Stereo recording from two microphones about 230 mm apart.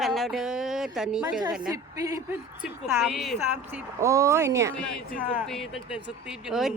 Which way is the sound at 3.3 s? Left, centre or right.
Centre.